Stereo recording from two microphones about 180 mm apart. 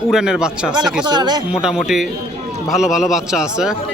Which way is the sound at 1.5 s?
5° right (ahead or behind).